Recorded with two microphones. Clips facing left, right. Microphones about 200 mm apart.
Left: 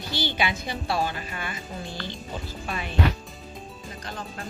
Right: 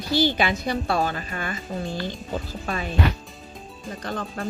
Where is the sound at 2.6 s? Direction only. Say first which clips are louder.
Right 2 dB; 40° right (ahead or behind).